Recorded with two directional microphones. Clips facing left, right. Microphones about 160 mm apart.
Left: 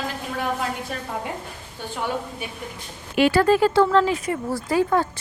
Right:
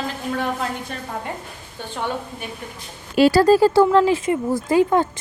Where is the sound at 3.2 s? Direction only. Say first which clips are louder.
Right 4 dB; 35° right (ahead or behind); by 5.1 s 20° right (ahead or behind).